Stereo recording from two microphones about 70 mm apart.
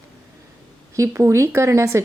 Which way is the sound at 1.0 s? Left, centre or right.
Right.